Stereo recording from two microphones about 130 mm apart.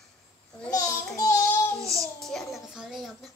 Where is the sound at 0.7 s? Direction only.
30° left (ahead or behind).